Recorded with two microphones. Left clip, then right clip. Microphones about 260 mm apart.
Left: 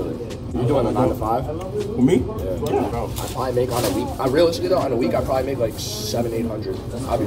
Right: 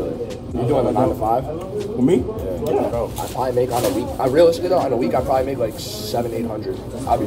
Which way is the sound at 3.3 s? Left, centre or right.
Centre.